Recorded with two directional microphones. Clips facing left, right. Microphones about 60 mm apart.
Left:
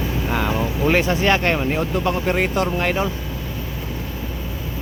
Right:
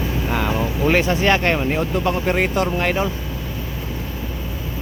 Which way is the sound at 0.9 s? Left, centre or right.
Centre.